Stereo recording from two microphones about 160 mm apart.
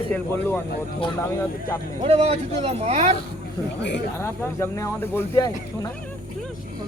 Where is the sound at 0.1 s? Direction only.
10° left (ahead or behind).